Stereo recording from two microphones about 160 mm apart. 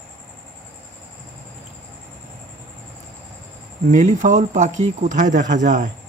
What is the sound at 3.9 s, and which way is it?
Speech, 50° right (ahead or behind).